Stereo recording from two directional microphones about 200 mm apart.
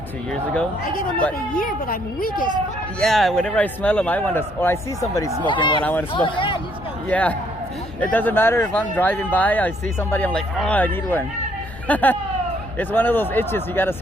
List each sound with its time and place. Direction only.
1.5 s a woman's voice: 45° left (ahead or behind)
3.0 s a man's voice: centre (ahead or behind); by 5.8 s 25° left (ahead or behind)
5.8 s speech: 10° left (ahead or behind)
6.1 s a man's voice: 25° left (ahead or behind)
7.1 s speech: 5° left (ahead or behind)